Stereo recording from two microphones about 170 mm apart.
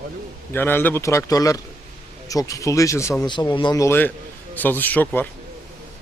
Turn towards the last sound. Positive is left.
turn(degrees=10)  # may be behind; listen again after turning